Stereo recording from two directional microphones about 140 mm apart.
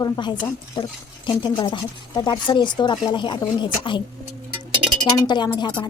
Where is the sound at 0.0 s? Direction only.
35° left (ahead or behind).